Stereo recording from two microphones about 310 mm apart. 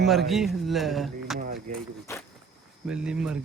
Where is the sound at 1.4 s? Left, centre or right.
Right.